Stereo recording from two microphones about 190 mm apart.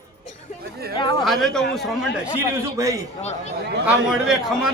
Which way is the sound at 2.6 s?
15° right (ahead or behind).